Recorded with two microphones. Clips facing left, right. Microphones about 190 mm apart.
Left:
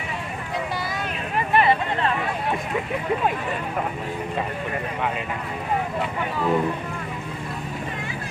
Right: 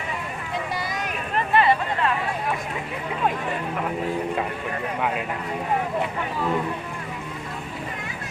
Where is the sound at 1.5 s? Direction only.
20° left (ahead or behind).